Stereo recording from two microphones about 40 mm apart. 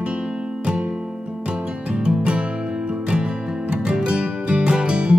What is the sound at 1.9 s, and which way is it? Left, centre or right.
Music, right.